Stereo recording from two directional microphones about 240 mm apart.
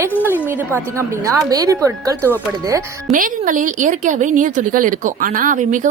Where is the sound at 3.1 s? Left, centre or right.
Right.